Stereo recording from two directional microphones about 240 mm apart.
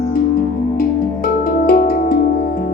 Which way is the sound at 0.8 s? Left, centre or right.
Left.